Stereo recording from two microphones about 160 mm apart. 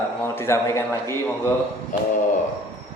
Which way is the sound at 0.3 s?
15° left (ahead or behind).